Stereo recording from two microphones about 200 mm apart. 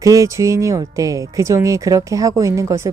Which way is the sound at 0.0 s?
15° right (ahead or behind).